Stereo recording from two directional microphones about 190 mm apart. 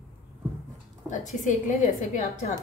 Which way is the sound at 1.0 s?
40° left (ahead or behind).